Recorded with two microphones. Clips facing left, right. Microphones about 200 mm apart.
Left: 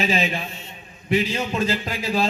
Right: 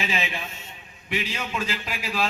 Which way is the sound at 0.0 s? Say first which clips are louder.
Left 6 dB; 35° left (ahead or behind).